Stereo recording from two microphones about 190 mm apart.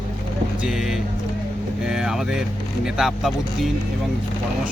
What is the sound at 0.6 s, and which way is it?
Speech, centre (ahead or behind).